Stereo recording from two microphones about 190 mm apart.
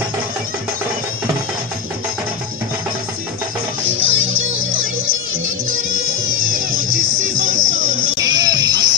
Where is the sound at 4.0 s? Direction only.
80° right.